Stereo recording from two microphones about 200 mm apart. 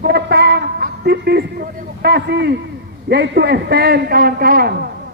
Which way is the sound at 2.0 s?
55° right (ahead or behind).